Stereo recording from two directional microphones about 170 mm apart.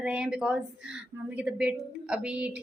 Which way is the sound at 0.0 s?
5° right (ahead or behind).